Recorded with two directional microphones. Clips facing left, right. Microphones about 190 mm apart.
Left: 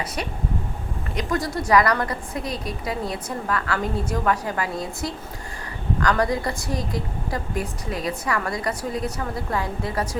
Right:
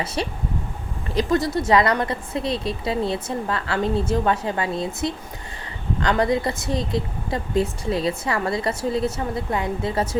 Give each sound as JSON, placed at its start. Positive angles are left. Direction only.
{"t": 0.0, "sound": "a woman's voice", "side_deg": -25}